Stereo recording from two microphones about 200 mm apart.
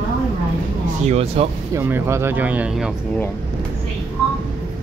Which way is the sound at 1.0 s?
30° right (ahead or behind).